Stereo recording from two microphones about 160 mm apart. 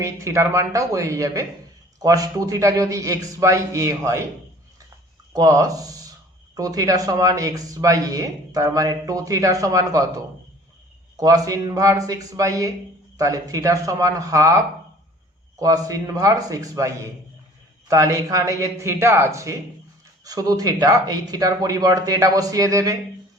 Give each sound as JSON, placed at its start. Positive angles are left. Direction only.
{"t": 0.0, "sound": "speech", "side_deg": -20}
{"t": 5.3, "sound": "speech", "side_deg": -20}
{"t": 11.2, "sound": "speech", "side_deg": -20}